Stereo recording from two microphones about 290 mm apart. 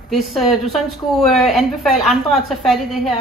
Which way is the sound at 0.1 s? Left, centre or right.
Centre.